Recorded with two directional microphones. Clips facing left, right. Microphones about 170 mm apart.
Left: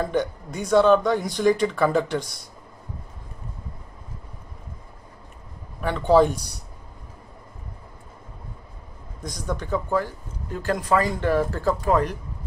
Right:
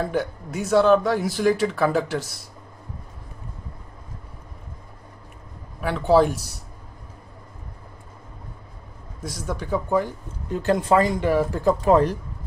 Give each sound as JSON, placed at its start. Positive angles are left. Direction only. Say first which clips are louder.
{"t": 0.0, "sound": "speech", "louder": "left 1 dB", "side_deg": -5}
{"t": 5.8, "sound": "speech", "louder": "even", "side_deg": -5}
{"t": 9.2, "sound": "speech", "louder": "even", "side_deg": -5}